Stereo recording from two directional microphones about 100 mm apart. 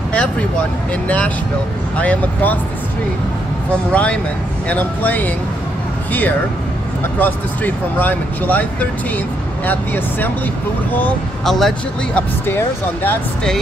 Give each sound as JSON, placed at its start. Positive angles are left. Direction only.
{"t": 0.1, "sound": "speech", "side_deg": 10}
{"t": 3.9, "sound": "speech", "side_deg": 15}
{"t": 7.2, "sound": "speech", "side_deg": 15}
{"t": 9.7, "sound": "speech", "side_deg": 20}
{"t": 11.4, "sound": "speech", "side_deg": 5}